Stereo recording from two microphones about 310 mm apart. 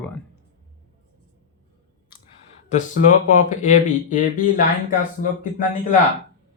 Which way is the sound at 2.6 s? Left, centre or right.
Left.